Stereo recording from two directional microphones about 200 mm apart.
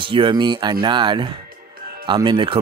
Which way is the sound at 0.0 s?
25° right (ahead or behind).